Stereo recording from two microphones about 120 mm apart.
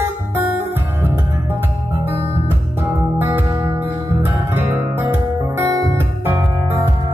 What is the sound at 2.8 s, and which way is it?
Music, 20° right (ahead or behind).